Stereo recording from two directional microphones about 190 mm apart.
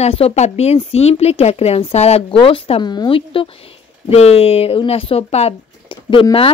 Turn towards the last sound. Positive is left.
turn(degrees=25)  # may be behind; listen again after turning